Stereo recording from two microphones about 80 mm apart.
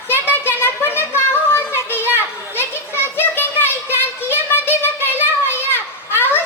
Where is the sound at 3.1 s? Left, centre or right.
Left.